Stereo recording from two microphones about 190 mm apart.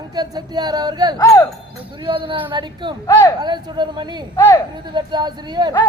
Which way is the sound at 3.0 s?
20° left (ahead or behind).